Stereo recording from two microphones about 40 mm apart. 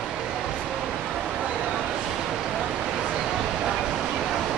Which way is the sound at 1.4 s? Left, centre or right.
Right.